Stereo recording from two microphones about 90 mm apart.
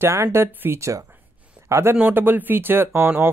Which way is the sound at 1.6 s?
30° right (ahead or behind).